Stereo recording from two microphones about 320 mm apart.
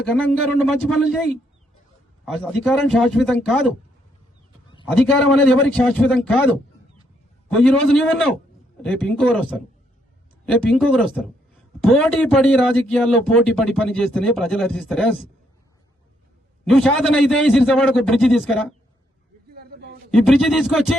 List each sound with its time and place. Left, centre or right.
0.8 s a man's voice: centre
4.9 s a man's voice: centre
7.4 s a man's voice: centre
16.6 s a man's voice: centre
19.5 s a sound: right
20.1 s a man's voice: centre